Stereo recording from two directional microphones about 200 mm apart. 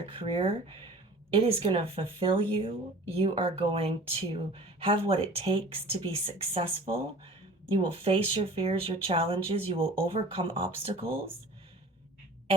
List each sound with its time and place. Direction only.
0.0 s speech: 25° right (ahead or behind)